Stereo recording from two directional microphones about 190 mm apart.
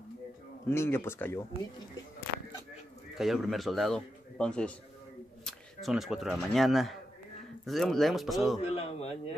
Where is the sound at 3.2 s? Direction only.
Centre (ahead or behind).